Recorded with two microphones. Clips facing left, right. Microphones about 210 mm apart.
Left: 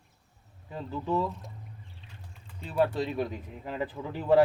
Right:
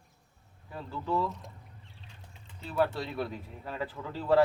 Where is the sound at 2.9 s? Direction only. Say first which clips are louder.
Left 4 dB; 15° left (ahead or behind).